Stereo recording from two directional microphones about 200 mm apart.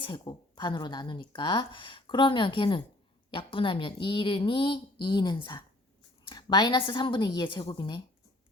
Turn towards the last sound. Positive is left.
turn(degrees=20)  # may be behind; listen again after turning